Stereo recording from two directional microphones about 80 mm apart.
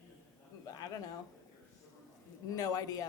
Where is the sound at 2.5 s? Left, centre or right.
Left.